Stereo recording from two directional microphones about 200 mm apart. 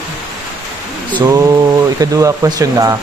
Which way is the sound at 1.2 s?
15° right (ahead or behind).